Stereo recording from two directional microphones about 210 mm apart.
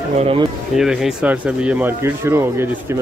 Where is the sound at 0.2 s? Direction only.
25° right (ahead or behind).